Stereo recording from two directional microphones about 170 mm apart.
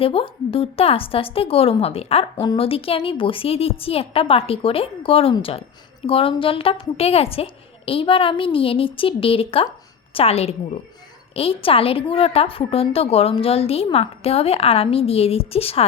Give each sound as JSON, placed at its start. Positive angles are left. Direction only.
{"t": 0.0, "sound": "a woman's voice", "side_deg": 35}